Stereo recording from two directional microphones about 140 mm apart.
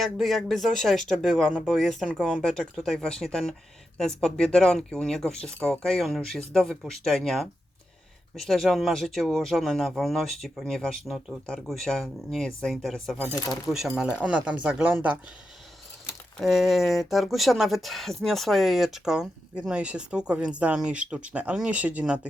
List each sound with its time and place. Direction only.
0.0 s speech: centre (ahead or behind)
16.4 s speech: centre (ahead or behind)